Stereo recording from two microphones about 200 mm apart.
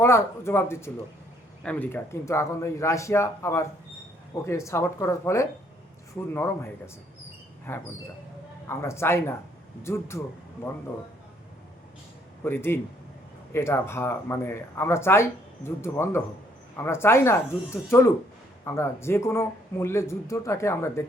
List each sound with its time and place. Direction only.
0.0 s speech: 15° left (ahead or behind)
12.4 s a man's voice: 10° left (ahead or behind)